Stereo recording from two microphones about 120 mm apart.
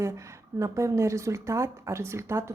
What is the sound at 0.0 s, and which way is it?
Speech, 25° right (ahead or behind).